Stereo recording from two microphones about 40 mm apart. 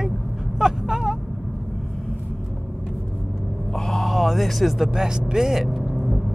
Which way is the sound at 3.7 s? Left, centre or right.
Centre.